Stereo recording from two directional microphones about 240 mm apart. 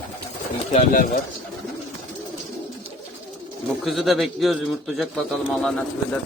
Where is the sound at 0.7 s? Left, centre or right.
Left.